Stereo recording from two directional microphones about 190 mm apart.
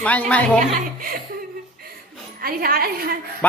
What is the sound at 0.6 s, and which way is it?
Speech, 50° right (ahead or behind).